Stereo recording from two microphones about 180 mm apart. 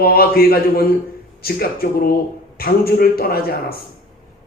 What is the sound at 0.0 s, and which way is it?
Speech, 55° left (ahead or behind).